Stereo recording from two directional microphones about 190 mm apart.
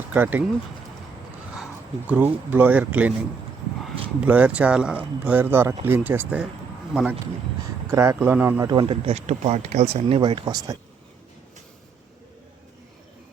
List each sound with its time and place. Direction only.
0.1 s speech: 10° right (ahead or behind)
2.0 s speech: 10° right (ahead or behind)
7.9 s speech: 15° right (ahead or behind)
8.7 s speech: 30° right (ahead or behind)